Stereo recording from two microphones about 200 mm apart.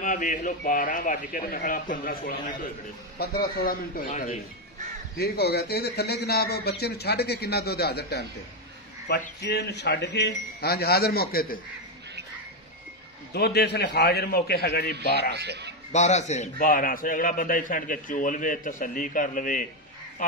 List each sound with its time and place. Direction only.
0.0 s a man's voice: 40° left (ahead or behind)
5.1 s a man's voice: 50° left (ahead or behind)
13.3 s a man's voice: 55° left (ahead or behind)
15.3 s a man's voice: 55° right (ahead or behind)
15.9 s a man's voice: 35° left (ahead or behind)